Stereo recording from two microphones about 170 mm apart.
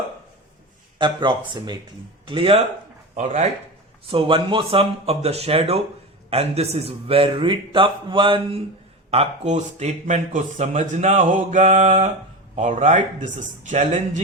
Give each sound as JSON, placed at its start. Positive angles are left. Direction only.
{"t": 0.9, "sound": "a man's voice", "side_deg": -25}
{"t": 4.1, "sound": "a man's voice", "side_deg": -30}